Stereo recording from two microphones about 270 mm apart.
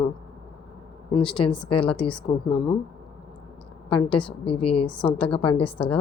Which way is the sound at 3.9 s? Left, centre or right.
Centre.